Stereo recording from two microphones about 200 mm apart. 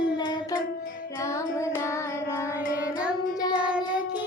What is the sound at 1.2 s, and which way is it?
Music, 15° left (ahead or behind).